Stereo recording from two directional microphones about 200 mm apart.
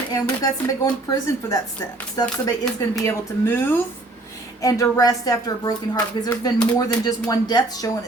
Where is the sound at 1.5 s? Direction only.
15° left (ahead or behind).